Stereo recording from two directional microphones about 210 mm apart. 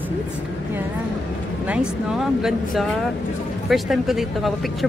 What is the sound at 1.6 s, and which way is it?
Speech, 5° right (ahead or behind).